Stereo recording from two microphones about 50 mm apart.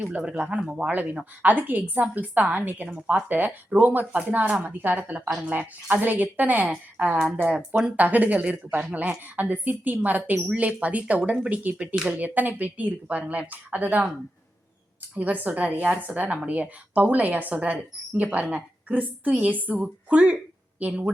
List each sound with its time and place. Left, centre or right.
0.1 s speech: right
0.9 s a woman's voice: right
15.1 s a woman's voice: right